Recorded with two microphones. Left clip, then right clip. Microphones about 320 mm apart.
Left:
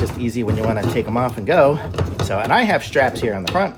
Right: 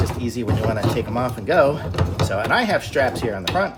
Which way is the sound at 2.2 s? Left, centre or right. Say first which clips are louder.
Left 3 dB; centre.